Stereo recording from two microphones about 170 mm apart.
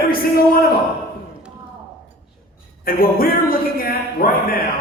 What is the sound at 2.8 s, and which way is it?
A man's voice, 60° left (ahead or behind).